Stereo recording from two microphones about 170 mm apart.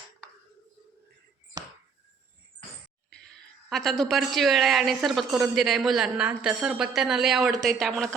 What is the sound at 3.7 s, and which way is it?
A woman's voice, centre (ahead or behind).